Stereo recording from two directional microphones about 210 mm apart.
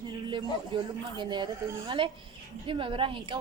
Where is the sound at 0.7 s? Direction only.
25° right (ahead or behind).